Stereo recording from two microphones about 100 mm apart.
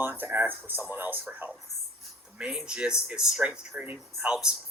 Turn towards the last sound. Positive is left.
turn(degrees=-10)  # may be behind; listen again after turning